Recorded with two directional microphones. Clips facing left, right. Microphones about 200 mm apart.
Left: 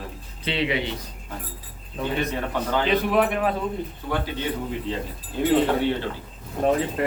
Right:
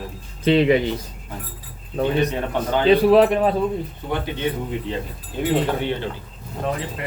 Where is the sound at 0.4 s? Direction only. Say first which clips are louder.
Right 10 dB; 45° right (ahead or behind).